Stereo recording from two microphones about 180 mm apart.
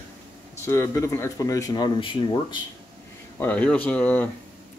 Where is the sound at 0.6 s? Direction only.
15° left (ahead or behind).